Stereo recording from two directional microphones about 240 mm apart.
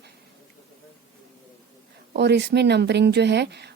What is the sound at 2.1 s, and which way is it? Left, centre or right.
Speech, right.